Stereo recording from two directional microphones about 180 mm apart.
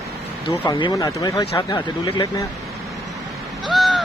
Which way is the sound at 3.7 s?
Centre (ahead or behind).